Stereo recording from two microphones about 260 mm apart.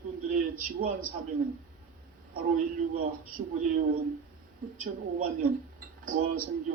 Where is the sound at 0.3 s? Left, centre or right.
Right.